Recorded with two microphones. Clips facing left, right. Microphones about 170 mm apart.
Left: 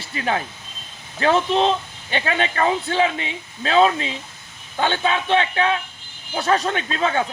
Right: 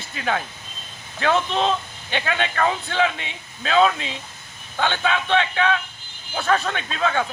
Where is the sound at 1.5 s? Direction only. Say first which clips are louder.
Left 3 dB; 35° left (ahead or behind).